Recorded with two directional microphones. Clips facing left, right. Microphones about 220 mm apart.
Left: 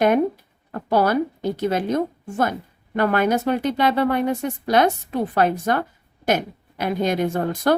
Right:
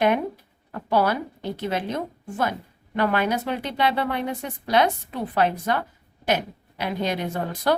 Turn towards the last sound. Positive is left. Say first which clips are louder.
# left 4 dB
turn(degrees=45)  # may be behind; listen again after turning